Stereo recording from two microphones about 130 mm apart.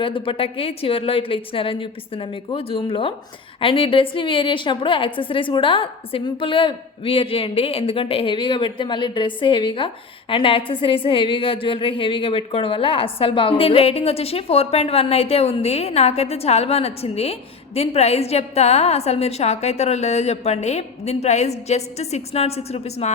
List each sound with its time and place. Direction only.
0.0 s a woman's voice: 40° left (ahead or behind)